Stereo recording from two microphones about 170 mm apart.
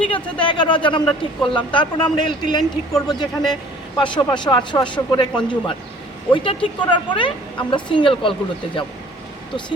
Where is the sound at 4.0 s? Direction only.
25° left (ahead or behind).